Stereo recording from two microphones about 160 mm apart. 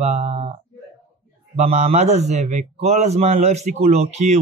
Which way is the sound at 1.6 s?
45° right (ahead or behind).